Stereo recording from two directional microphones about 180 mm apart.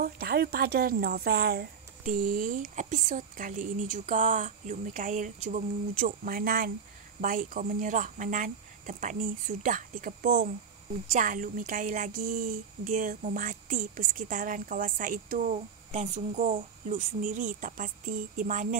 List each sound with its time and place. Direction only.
0.0 s a woman's voice: 55° right (ahead or behind)